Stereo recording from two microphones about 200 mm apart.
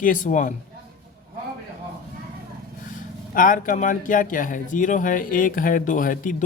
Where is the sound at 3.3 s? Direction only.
40° left (ahead or behind).